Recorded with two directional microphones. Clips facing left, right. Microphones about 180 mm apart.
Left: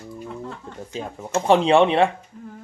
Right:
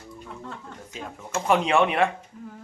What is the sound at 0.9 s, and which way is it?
Speech, 30° left (ahead or behind).